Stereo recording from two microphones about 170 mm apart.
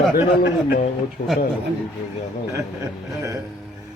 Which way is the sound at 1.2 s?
80° left.